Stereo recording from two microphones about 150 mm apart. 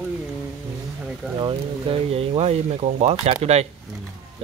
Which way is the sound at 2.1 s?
40° right (ahead or behind).